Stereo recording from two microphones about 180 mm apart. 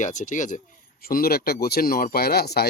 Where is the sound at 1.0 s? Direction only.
55° left (ahead or behind).